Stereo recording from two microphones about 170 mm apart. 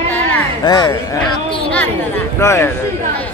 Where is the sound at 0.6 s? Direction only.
25° left (ahead or behind).